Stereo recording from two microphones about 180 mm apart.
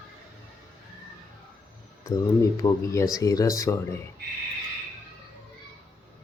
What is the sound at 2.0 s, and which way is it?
Speech, 20° left (ahead or behind).